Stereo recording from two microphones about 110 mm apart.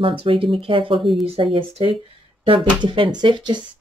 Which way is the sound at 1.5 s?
55° right (ahead or behind).